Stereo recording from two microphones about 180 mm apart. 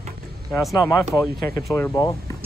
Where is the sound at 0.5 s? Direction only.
Centre (ahead or behind).